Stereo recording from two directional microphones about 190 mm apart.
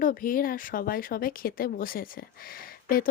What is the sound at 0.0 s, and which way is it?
Speech, 45° left (ahead or behind).